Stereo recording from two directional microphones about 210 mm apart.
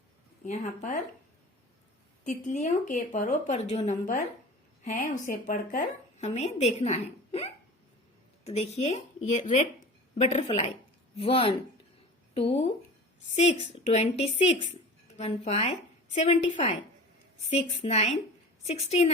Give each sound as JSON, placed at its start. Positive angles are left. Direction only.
{"t": 0.4, "sound": "a woman's voice", "side_deg": 35}
{"t": 2.2, "sound": "a woman's voice", "side_deg": 35}